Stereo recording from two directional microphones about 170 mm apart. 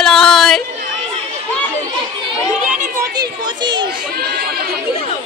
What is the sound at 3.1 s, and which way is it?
Speech, 25° right (ahead or behind).